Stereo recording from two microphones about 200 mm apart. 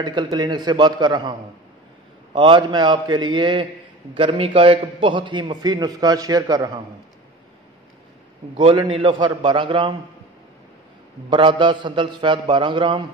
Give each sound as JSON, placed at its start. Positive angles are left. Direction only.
{"t": 0.0, "sound": "a man's voice", "side_deg": -20}
{"t": 2.3, "sound": "a man's voice", "side_deg": -25}
{"t": 8.5, "sound": "a man's voice", "side_deg": -25}
{"t": 11.2, "sound": "a man's voice", "side_deg": -25}